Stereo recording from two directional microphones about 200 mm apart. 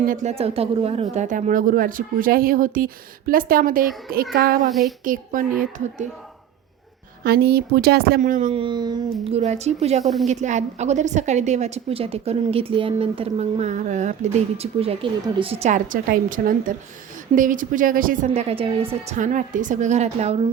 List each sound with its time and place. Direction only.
0.1 s speech: 35° right (ahead or behind)
4.7 s speech: centre (ahead or behind)
5.0 s a woman's voice: 40° right (ahead or behind)
7.3 s speech: 55° right (ahead or behind)
8.2 s a woman's voice: 40° right (ahead or behind)
8.6 s child singing: 20° right (ahead or behind)
9.2 s a woman's voice: 30° right (ahead or behind)
18.3 s a woman's voice: 30° right (ahead or behind)